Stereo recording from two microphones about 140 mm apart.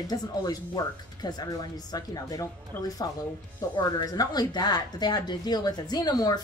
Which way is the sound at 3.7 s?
25° left (ahead or behind).